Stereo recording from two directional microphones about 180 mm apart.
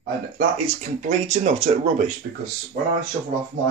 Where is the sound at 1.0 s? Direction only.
40° right (ahead or behind).